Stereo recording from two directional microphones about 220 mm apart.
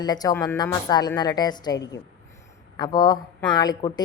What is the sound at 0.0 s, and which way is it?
A woman's voice, 15° left (ahead or behind).